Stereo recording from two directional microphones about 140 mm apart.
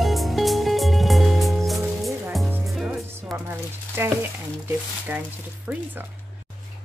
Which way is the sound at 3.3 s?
15° right (ahead or behind).